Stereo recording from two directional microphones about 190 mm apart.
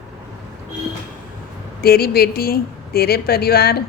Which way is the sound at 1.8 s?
55° left (ahead or behind).